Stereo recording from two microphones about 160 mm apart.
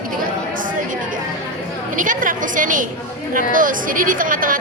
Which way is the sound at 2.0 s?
55° right (ahead or behind).